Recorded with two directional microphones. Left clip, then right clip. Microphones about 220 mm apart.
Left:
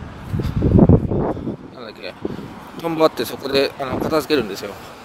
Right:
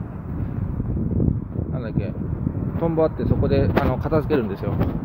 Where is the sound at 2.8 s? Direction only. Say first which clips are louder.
Left 4 dB; 25° left (ahead or behind).